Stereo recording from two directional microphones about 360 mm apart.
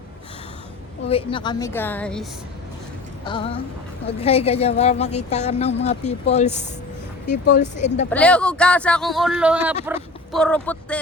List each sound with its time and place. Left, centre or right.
1.0 s speech: centre
3.2 s speech: centre
8.1 s speech: centre